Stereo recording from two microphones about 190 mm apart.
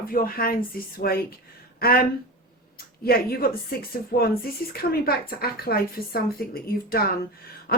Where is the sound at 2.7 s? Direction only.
55° left (ahead or behind).